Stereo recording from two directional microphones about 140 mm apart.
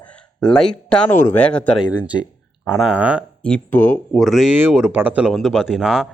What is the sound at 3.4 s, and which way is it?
Speech, 10° left (ahead or behind).